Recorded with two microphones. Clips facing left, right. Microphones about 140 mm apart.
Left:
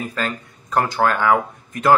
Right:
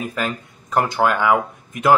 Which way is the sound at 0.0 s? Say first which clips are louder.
Right 1 dB; 15° right (ahead or behind).